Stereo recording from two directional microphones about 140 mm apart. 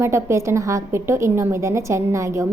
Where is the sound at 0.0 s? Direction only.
20° right (ahead or behind).